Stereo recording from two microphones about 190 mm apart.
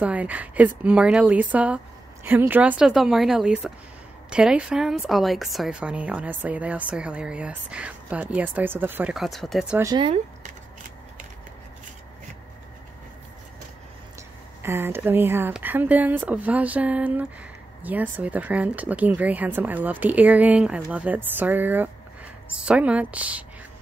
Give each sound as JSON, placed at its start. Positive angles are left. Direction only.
{"t": 0.0, "sound": "a woman's voice", "side_deg": -5}
{"t": 9.8, "sound": "speech", "side_deg": -25}
{"t": 14.6, "sound": "speech", "side_deg": -10}